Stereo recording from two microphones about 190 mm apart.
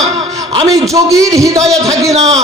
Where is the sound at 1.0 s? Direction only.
20° right (ahead or behind).